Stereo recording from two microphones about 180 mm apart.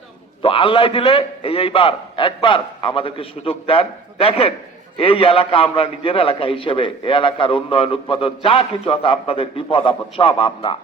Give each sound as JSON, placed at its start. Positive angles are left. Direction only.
{"t": 0.4, "sound": "a man's voice", "side_deg": 30}